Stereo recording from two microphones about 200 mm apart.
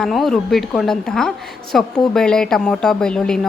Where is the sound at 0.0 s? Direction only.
Centre (ahead or behind).